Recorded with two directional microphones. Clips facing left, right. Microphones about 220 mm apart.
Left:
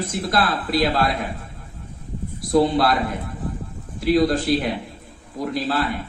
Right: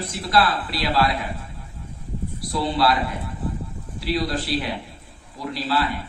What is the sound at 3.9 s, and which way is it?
Speech, 45° left (ahead or behind).